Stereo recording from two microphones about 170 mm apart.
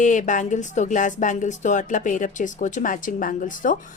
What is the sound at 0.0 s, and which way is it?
Speech, 45° left (ahead or behind).